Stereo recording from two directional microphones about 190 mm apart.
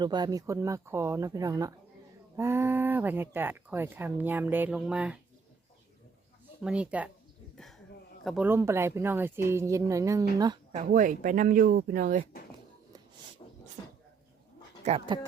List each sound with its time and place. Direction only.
0.0 s speech: 20° right (ahead or behind); by 5.2 s 5° right (ahead or behind)
6.6 s speech: 5° right (ahead or behind)
7.5 s a sound: centre (ahead or behind)
8.2 s speech: centre (ahead or behind)
8.4 s speech: 15° right (ahead or behind)
10.7 s speech: 40° right (ahead or behind)
13.4 s a sound: 30° left (ahead or behind)
14.8 s speech: 30° right (ahead or behind)